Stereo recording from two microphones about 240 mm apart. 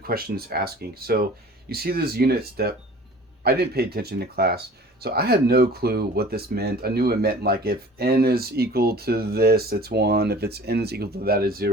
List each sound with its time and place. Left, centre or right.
0.0 s speech: right